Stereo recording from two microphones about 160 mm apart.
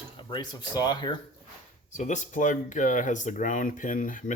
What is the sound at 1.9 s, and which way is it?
Speech, 50° left (ahead or behind).